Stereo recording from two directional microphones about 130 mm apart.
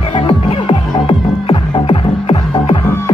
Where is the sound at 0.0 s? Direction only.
40° left (ahead or behind).